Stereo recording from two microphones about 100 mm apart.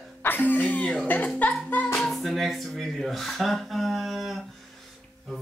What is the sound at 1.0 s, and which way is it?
Speech, 15° left (ahead or behind).